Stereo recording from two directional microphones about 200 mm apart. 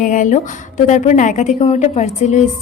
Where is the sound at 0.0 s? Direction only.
40° left (ahead or behind).